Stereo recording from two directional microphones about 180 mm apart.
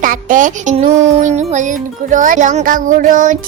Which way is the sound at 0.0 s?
50° right (ahead or behind).